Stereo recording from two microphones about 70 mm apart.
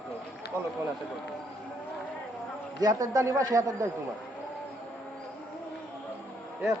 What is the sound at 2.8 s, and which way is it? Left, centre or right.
Speech, right.